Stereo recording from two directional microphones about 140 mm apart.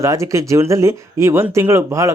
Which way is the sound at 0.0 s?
20° right (ahead or behind).